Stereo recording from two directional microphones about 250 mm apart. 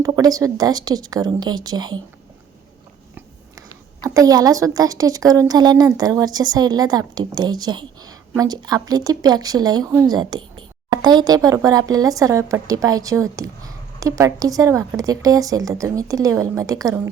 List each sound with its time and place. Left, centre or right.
0.0 s speech: centre
4.0 s speech: centre